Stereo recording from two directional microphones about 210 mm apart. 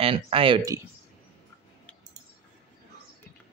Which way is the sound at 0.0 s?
25° right (ahead or behind).